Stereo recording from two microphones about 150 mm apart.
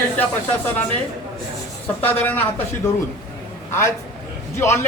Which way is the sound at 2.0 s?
10° left (ahead or behind).